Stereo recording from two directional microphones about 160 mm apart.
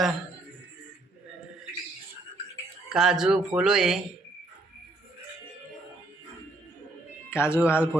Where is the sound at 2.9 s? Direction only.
5° right (ahead or behind).